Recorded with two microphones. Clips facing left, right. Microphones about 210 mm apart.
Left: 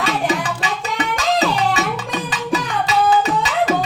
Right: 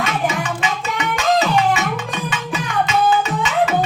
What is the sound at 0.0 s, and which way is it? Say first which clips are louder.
Music: left 1 dB; 35° left (ahead or behind).